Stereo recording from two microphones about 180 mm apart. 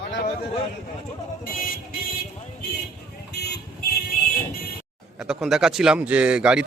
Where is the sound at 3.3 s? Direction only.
65° left (ahead or behind).